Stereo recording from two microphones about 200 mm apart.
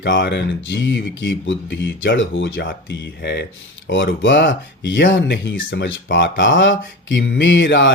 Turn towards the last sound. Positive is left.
turn(degrees=65)  # may be behind; listen again after turning